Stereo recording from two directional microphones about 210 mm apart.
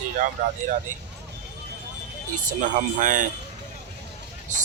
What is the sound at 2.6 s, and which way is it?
Speech, 40° right (ahead or behind).